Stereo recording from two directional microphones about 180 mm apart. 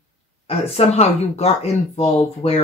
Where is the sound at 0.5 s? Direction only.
35° left (ahead or behind).